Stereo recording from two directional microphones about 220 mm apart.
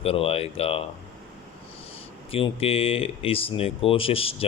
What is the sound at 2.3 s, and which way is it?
Speech, 25° left (ahead or behind).